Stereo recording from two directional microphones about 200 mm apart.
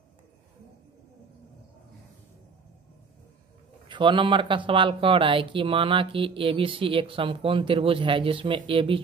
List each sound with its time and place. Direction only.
3.9 s speech: 25° right (ahead or behind)